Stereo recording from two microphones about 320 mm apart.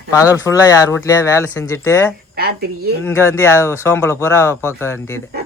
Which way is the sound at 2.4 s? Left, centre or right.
Right.